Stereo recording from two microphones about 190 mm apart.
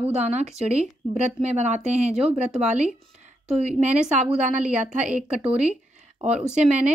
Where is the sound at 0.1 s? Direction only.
35° right (ahead or behind).